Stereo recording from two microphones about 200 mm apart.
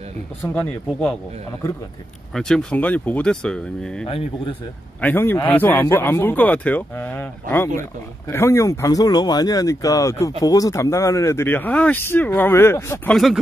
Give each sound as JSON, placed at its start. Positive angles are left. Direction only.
{"t": 0.4, "sound": "speech", "side_deg": 5}
{"t": 2.3, "sound": "speech", "side_deg": 5}
{"t": 4.0, "sound": "speech", "side_deg": 25}
{"t": 5.0, "sound": "speech", "side_deg": 10}
{"t": 13.1, "sound": "speech", "side_deg": 0}